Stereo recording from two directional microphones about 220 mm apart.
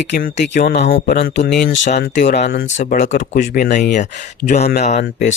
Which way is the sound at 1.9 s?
40° left (ahead or behind).